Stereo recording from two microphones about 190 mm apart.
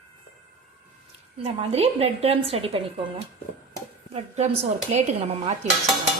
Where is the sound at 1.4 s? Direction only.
35° right (ahead or behind).